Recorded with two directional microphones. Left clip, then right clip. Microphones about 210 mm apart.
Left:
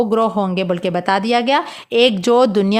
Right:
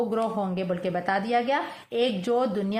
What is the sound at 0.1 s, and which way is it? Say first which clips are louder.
Speech: left 10 dB; 40° left (ahead or behind).